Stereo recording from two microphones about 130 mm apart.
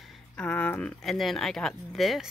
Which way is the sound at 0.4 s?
10° left (ahead or behind).